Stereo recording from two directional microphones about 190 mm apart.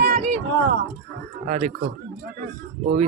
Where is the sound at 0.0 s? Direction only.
55° right (ahead or behind).